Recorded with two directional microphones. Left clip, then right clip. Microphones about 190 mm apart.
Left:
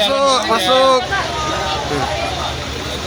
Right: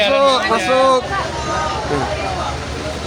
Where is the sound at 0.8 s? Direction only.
5° right (ahead or behind).